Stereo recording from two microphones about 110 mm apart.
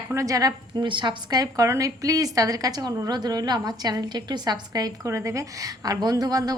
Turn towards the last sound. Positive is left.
turn(degrees=-35)  # may be behind; listen again after turning